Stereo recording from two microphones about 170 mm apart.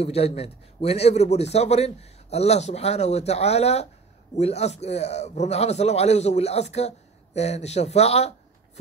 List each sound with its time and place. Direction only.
0.0 s a man's voice: 35° left (ahead or behind)